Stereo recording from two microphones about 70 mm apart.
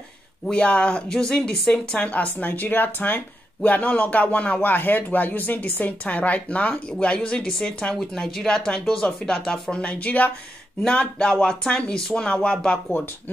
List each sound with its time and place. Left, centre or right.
0.5 s speech: centre
2.0 s speech: left